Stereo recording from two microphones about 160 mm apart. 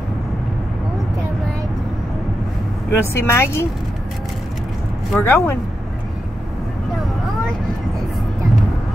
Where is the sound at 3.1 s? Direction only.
15° left (ahead or behind).